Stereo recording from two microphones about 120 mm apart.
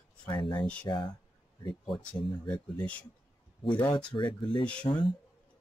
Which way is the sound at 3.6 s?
40° left (ahead or behind).